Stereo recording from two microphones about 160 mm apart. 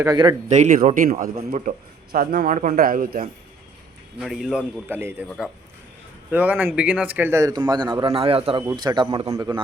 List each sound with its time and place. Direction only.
0.0 s speech: 25° right (ahead or behind)
0.4 s speech: 50° right (ahead or behind); by 1.8 s 65° right (ahead or behind)
2.1 s a man's voice: 90° right
2.5 s speech: 50° right (ahead or behind)
4.2 s a man's voice: centre (ahead or behind)
4.9 s a man's voice: 15° right (ahead or behind)
8.0 s a man's voice: 35° right (ahead or behind)
8.6 s speech: 25° right (ahead or behind)